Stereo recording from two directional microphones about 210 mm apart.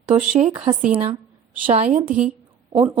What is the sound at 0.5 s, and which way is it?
A woman's voice, 25° right (ahead or behind).